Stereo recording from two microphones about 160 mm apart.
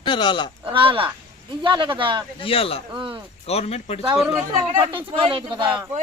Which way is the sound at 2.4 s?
35° left (ahead or behind).